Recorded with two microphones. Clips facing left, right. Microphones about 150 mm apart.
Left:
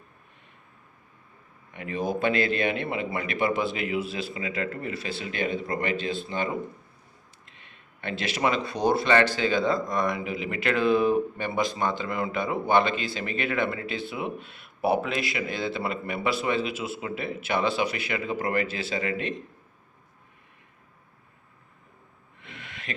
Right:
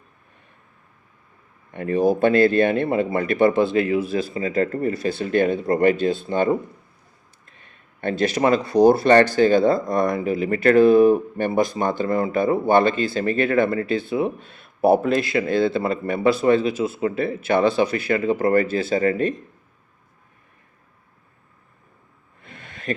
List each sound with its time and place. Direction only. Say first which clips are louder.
1.7 s speech: right 10 dB; 45° right (ahead or behind)
3.7 s speech: right 11 dB; 20° left (ahead or behind)
4.1 s speech: right 9 dB; 40° right (ahead or behind)
7.6 s speech: right 10 dB; 45° right (ahead or behind)
22.4 s a sound: right 1 dB; 45° right (ahead or behind)